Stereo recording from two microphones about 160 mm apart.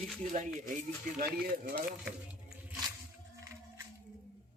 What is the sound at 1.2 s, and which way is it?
Speech, 70° right (ahead or behind).